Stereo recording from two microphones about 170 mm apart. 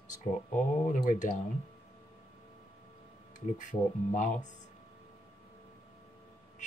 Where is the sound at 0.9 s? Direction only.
45° left (ahead or behind).